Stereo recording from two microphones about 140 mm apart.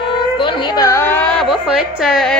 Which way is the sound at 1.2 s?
5° left (ahead or behind).